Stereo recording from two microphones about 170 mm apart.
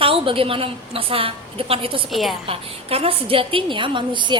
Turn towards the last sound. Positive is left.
turn(degrees=-30)  # may be behind; listen again after turning